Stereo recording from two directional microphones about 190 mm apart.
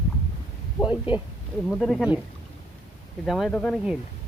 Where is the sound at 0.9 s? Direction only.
25° left (ahead or behind).